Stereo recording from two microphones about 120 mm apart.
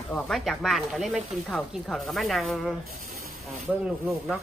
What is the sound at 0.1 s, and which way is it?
A woman's voice, centre (ahead or behind).